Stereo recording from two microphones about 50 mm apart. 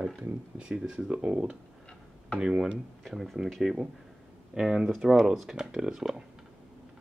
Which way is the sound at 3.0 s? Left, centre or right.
Centre.